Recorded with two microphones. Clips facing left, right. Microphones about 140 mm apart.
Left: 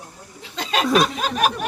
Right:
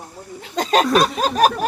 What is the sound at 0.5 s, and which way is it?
Speech, 45° right (ahead or behind).